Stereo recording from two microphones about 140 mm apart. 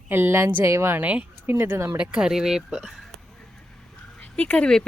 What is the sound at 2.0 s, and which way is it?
Speech, 5° right (ahead or behind).